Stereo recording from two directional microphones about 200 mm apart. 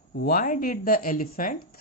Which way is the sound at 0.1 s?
50° left (ahead or behind).